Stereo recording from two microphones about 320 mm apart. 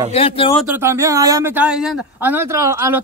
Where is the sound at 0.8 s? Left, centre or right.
Centre.